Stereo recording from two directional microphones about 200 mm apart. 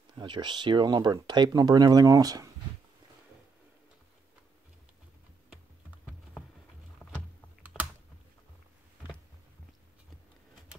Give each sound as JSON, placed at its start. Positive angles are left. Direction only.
{"t": 0.1, "sound": "speech", "side_deg": -20}
{"t": 7.0, "sound": "a sound", "side_deg": 10}
{"t": 7.7, "sound": "typing", "side_deg": 0}